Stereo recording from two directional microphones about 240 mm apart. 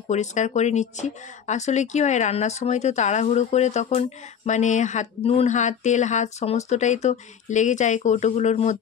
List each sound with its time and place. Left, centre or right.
0.1 s speech: left